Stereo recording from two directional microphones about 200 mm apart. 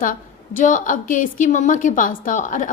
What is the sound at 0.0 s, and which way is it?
A woman's voice, 40° left (ahead or behind).